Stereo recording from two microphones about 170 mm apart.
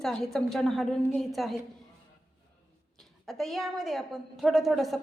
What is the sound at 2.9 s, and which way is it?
A woman's voice, centre (ahead or behind).